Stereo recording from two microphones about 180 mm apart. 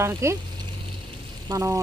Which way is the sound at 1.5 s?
15° right (ahead or behind).